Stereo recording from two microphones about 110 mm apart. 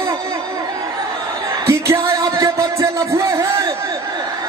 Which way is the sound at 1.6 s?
25° right (ahead or behind).